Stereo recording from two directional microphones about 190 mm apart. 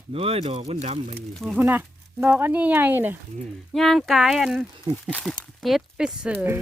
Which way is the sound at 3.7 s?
Centre (ahead or behind).